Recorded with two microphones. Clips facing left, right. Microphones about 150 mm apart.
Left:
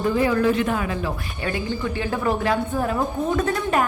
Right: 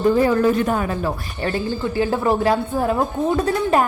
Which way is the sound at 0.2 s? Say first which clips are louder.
Right 3 dB; 40° right (ahead or behind).